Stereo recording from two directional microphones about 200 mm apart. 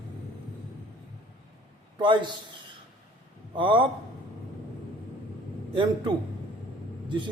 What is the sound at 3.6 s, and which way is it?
Speech, 25° right (ahead or behind).